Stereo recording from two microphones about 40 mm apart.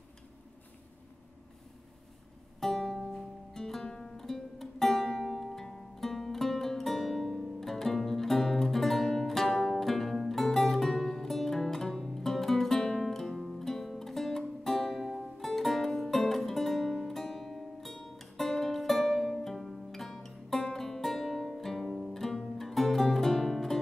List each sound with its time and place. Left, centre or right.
2.6 s music: centre
3.9 s music: left
4.2 s music: centre
15.2 s music: centre